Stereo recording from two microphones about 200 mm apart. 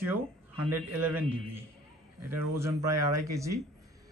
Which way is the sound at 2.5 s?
15° right (ahead or behind).